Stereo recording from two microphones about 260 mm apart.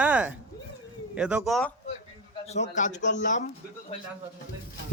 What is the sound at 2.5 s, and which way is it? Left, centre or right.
Speech, left.